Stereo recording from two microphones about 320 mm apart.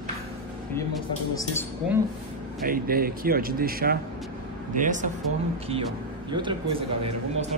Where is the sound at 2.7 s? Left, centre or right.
Right.